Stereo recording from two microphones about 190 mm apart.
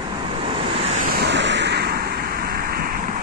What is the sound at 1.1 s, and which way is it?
Vehicle, 65° right (ahead or behind).